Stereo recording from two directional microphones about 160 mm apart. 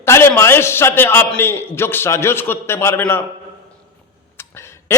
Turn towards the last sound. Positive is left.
turn(degrees=15)  # may be behind; listen again after turning